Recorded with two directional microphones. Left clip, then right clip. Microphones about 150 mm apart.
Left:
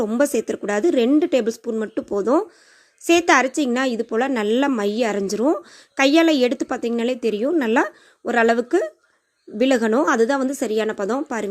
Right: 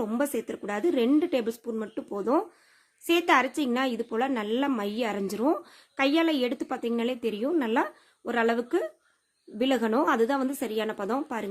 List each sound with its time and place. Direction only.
0.0 s a woman's voice: 30° left (ahead or behind)